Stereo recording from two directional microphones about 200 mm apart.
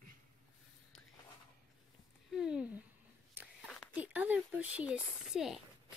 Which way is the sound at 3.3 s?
10° right (ahead or behind).